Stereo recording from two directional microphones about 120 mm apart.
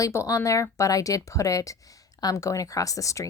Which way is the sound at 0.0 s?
25° left (ahead or behind).